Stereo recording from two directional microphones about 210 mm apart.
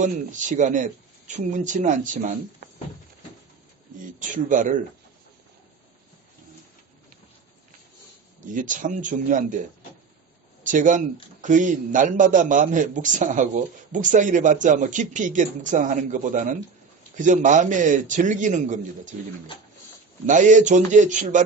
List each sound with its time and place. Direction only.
0.0 s speech: 35° right (ahead or behind)
4.2 s speech: 40° right (ahead or behind)
8.5 s speech: 40° right (ahead or behind)
10.6 s speech: 40° right (ahead or behind)
20.2 s speech: 35° right (ahead or behind)